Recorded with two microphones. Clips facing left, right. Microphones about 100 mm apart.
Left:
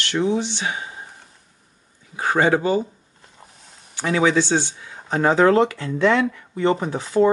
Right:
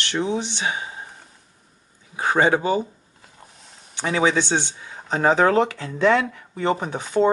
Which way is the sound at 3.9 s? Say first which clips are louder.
Left 2 dB; 20° right (ahead or behind).